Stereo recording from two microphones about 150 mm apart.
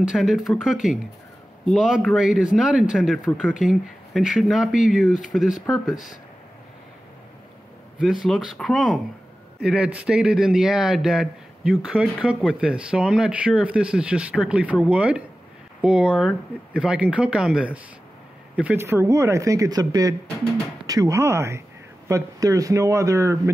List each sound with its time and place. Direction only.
0.0 s speech: centre (ahead or behind)
8.0 s speech: centre (ahead or behind); by 23.5 s 20° right (ahead or behind)